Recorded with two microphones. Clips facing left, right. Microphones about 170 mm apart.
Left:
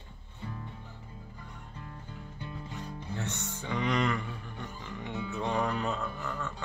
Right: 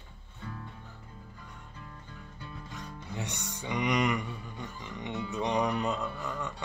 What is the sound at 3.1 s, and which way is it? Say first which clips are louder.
Music: left 1 dB; 15° right (ahead or behind).